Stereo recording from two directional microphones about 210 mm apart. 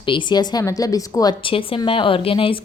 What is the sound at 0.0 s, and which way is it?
Speech, 25° left (ahead or behind).